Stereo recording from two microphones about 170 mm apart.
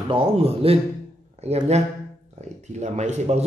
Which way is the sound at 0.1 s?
35° right (ahead or behind).